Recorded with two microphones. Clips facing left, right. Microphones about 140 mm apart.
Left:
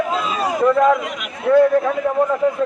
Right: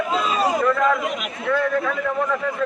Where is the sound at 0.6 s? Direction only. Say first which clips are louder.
Left 9 dB; 20° left (ahead or behind).